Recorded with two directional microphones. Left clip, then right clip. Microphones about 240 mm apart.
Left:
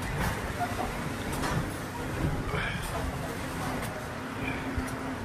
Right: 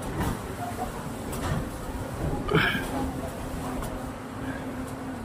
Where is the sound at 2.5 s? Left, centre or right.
Right.